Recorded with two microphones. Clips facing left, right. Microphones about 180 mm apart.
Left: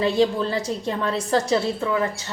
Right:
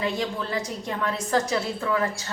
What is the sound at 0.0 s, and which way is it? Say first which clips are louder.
Speech: left 8 dB; 30° left (ahead or behind).